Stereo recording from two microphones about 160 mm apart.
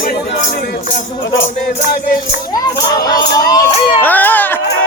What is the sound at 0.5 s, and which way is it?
Music, 60° left (ahead or behind).